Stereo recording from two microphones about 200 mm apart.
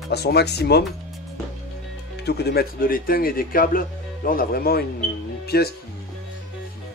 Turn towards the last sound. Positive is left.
turn(degrees=50)  # may be behind; listen again after turning